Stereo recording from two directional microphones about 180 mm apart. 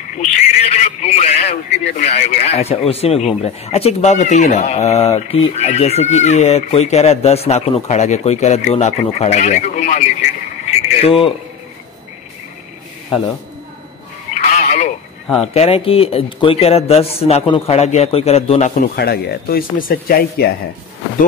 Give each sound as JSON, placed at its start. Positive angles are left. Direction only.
{"t": 0.2, "sound": "a sound", "side_deg": 35}
{"t": 2.9, "sound": "speech", "side_deg": 35}
{"t": 11.1, "sound": "speech", "side_deg": 30}
{"t": 14.5, "sound": "telephone", "side_deg": 40}
{"t": 15.4, "sound": "speech", "side_deg": 35}
{"t": 18.9, "sound": "speech", "side_deg": 60}